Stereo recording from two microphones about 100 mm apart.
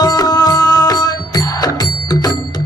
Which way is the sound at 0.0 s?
40° left (ahead or behind).